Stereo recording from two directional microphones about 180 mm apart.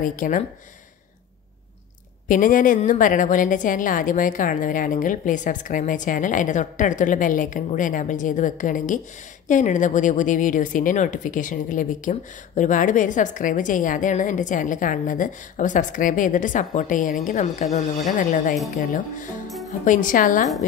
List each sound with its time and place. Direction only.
0.0 s a woman's voice: 50° left (ahead or behind)
2.2 s a woman's voice: 50° left (ahead or behind)
19.8 s a woman's voice: 45° left (ahead or behind)